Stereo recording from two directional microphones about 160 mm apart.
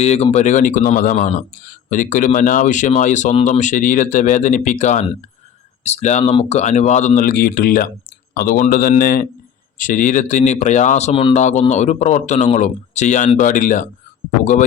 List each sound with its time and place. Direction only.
0.0 s speech: 40° left (ahead or behind); by 9.2 s 65° left (ahead or behind)
9.7 s speech: 55° left (ahead or behind); by 11.3 s 35° left (ahead or behind)
11.3 s speech: 45° left (ahead or behind)